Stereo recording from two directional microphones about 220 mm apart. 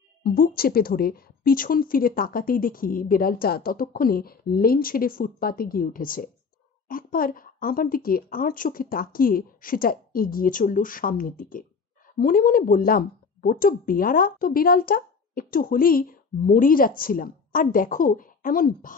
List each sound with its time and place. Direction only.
0.2 s speech: 40° left (ahead or behind)